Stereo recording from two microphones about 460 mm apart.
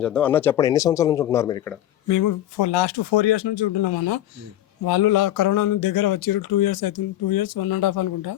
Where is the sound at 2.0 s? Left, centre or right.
Left.